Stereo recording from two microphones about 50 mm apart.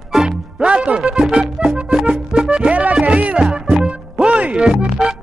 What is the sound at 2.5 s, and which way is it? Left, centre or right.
Music, centre.